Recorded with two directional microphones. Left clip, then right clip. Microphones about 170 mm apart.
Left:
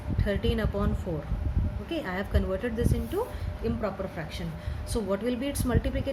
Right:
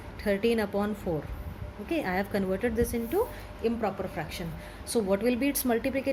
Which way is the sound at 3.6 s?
55° right (ahead or behind).